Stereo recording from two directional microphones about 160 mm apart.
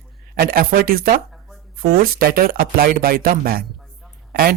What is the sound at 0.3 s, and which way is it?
Speech, 65° right (ahead or behind).